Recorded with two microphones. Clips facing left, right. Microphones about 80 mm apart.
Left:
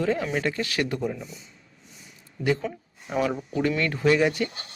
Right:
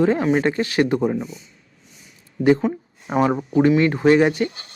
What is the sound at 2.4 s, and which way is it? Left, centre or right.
Speech, right.